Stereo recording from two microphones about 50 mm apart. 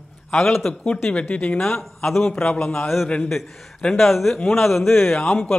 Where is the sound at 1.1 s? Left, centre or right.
Left.